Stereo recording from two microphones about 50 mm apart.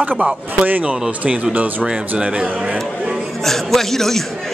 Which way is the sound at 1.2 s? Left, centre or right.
Right.